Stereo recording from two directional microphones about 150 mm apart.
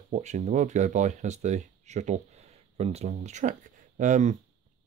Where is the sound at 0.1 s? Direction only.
50° right (ahead or behind).